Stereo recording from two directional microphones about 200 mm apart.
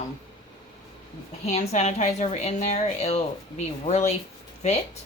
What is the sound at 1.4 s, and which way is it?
Speech, 30° left (ahead or behind).